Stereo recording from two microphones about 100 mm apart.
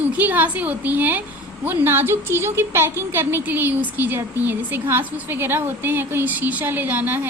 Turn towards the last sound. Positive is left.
turn(degrees=-20)  # may be behind; listen again after turning